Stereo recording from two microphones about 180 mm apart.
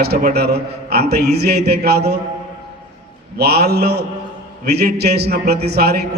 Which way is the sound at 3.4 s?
65° right (ahead or behind).